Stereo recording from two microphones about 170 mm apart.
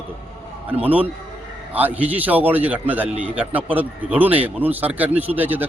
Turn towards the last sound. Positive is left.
turn(degrees=-10)  # may be behind; listen again after turning